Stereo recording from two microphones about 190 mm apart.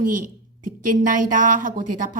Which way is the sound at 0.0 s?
45° right (ahead or behind).